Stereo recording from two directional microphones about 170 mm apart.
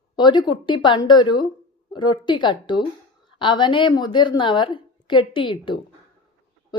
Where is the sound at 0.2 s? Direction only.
25° left (ahead or behind).